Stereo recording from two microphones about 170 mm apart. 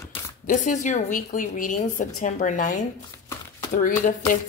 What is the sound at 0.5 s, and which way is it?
A woman's voice, 45° left (ahead or behind).